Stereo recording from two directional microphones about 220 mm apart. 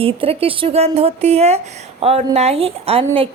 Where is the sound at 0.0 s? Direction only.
25° right (ahead or behind).